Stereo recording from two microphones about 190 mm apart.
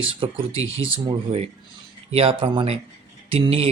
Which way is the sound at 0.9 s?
25° right (ahead or behind).